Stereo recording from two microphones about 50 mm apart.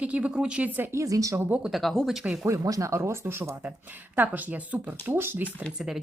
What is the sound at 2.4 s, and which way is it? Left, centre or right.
Speech, right.